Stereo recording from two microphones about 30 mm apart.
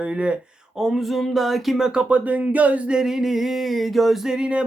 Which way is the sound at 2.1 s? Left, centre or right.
Right.